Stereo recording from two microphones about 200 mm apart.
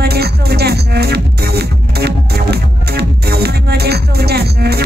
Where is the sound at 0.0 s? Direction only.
50° right (ahead or behind).